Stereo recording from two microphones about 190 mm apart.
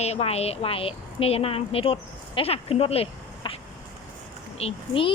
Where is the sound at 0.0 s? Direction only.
35° left (ahead or behind).